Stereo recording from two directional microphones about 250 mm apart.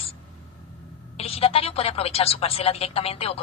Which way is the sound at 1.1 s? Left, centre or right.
Left.